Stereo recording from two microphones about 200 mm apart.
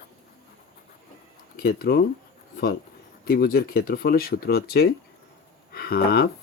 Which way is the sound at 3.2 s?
50° left (ahead or behind).